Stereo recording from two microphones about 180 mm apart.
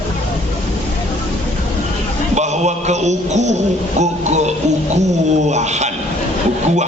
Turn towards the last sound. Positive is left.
turn(degrees=-40)  # may be behind; listen again after turning